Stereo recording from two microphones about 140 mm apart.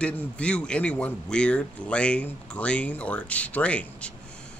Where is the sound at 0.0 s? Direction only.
10° left (ahead or behind).